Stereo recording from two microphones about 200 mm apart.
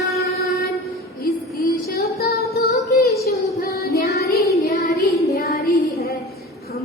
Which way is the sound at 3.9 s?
50° left (ahead or behind).